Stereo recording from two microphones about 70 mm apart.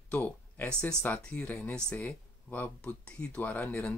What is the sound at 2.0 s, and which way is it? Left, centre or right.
Speech, left.